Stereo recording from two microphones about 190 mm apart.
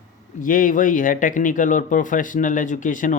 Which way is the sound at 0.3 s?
45° left (ahead or behind).